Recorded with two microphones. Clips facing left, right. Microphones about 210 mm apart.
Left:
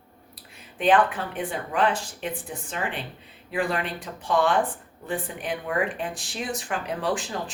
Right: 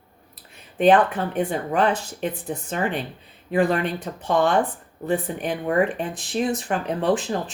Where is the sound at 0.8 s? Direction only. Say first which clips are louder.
Right 4 dB; 40° right (ahead or behind).